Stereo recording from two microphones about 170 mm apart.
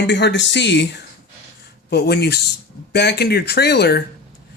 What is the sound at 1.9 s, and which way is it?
A man's voice, 70° left (ahead or behind).